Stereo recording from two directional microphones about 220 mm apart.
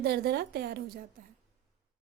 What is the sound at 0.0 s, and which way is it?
Speech, 45° right (ahead or behind).